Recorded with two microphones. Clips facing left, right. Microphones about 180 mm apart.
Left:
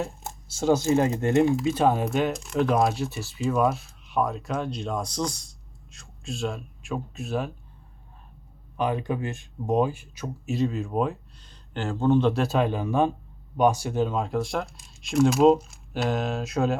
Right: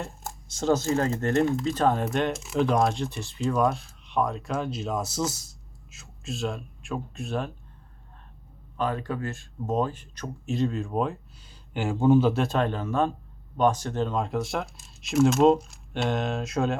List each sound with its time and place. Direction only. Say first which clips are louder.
0.5 s speech: left 3 dB; 10° left (ahead or behind)
8.7 s speech: left 2 dB; 15° left (ahead or behind)
11.7 s speech: right 2 dB; 10° right (ahead or behind)